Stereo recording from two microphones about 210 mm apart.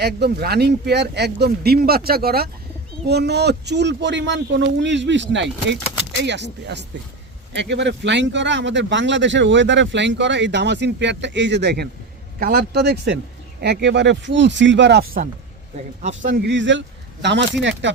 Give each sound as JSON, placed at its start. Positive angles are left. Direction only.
{"t": 0.0, "sound": "speech", "side_deg": -50}
{"t": 16.0, "sound": "speech", "side_deg": -40}
{"t": 16.5, "sound": "speech", "side_deg": -60}